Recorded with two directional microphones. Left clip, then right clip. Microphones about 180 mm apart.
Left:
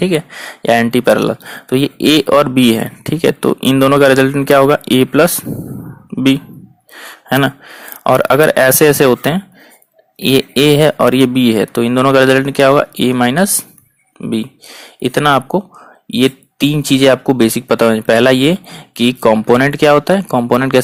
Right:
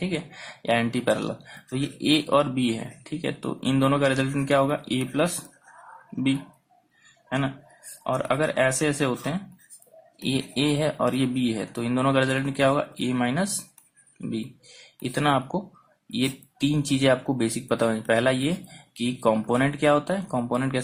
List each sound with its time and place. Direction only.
0.0 s speech: 45° left (ahead or behind)
7.3 s speech: 60° left (ahead or behind)
15.0 s speech: 40° left (ahead or behind)